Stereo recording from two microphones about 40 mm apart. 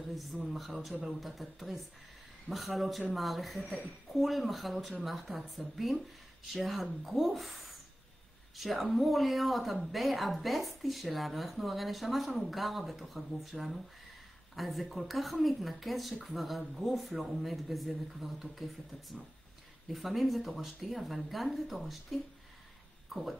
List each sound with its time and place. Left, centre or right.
0.1 s a woman's voice: centre
3.6 s a woman's voice: left
4.1 s a woman's voice: centre